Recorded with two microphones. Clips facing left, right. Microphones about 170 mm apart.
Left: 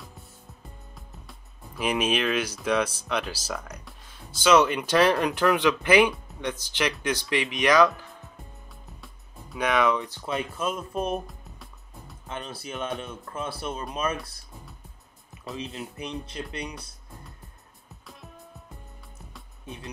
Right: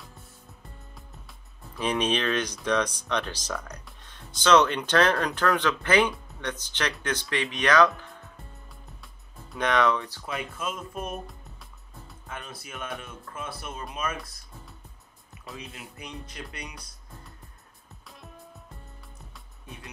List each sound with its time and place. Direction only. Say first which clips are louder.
1.6 s speech: left 1 dB; 10° left (ahead or behind)
9.0 s music: left 2 dB; 5° left (ahead or behind)
10.0 s speech: left 4 dB; 25° left (ahead or behind)
12.3 s speech: left 5 dB; 30° left (ahead or behind)
15.5 s speech: left 7 dB; 25° left (ahead or behind)
19.6 s music: left 5 dB; 25° left (ahead or behind)